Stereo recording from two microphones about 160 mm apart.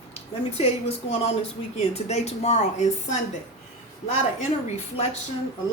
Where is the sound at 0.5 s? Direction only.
40° left (ahead or behind).